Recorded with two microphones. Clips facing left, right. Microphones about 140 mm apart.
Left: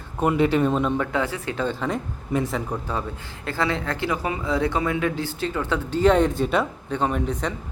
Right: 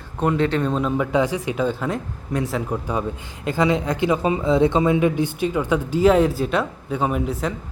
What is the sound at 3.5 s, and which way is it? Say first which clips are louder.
A man's voice: right 5 dB; 15° right (ahead or behind).